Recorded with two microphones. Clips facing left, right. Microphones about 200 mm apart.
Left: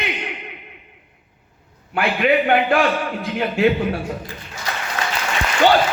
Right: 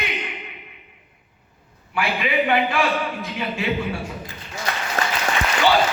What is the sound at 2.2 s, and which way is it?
Speech, 50° left (ahead or behind).